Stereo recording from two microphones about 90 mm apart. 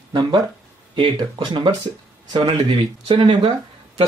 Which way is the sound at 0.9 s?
60° right (ahead or behind).